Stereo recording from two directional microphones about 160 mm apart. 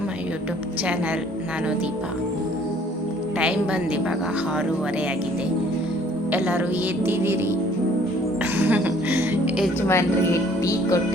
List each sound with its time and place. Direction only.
6.3 s speech: 10° right (ahead or behind)
8.5 s music: 10° right (ahead or behind)
9.8 s speech: 15° left (ahead or behind)
10.6 s music: 20° left (ahead or behind)